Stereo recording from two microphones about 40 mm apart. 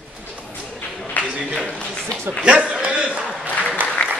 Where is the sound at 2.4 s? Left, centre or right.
Right.